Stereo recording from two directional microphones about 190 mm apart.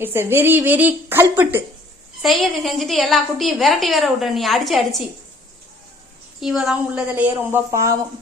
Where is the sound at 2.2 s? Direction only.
Centre (ahead or behind).